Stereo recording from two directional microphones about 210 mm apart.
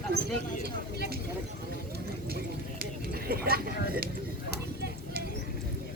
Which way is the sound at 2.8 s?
45° right (ahead or behind).